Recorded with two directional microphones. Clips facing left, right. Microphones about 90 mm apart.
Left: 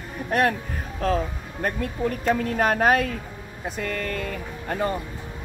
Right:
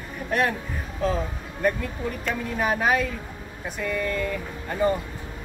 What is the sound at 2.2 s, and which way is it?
Speech, 60° left (ahead or behind).